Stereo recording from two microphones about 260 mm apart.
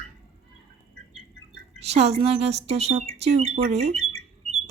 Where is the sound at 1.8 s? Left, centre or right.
Right.